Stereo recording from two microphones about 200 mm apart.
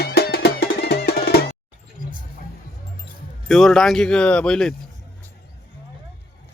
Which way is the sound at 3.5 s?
Centre (ahead or behind).